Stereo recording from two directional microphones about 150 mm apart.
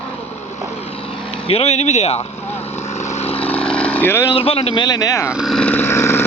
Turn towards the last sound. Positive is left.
turn(degrees=15)  # may be behind; listen again after turning